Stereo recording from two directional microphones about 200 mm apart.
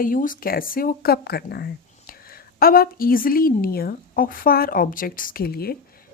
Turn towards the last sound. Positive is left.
turn(degrees=50)  # may be behind; listen again after turning